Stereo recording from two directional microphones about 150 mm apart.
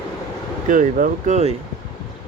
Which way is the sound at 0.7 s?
60° right (ahead or behind).